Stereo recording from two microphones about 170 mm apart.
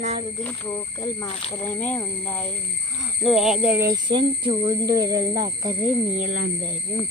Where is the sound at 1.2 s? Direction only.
35° left (ahead or behind).